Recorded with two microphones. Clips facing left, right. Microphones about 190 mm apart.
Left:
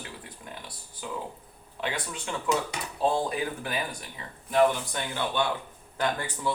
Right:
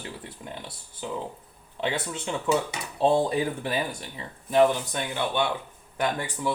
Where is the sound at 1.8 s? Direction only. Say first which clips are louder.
Right 4 dB; 25° right (ahead or behind).